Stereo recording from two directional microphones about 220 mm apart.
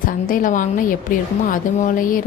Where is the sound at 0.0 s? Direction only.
40° left (ahead or behind).